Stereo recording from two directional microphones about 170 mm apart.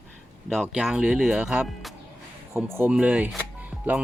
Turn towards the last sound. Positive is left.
turn(degrees=0)  # may be behind; listen again after turning